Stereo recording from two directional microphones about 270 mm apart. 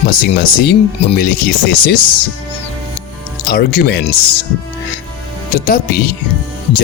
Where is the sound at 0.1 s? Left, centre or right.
Left.